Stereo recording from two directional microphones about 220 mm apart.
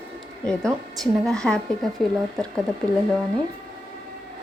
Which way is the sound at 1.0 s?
5° left (ahead or behind).